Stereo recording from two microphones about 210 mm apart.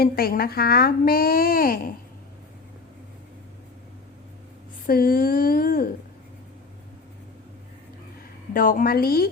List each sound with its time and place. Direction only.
0.0 s a woman's voice: 45° left (ahead or behind)
4.9 s a woman's voice: 45° left (ahead or behind)
8.5 s a woman's voice: 40° left (ahead or behind)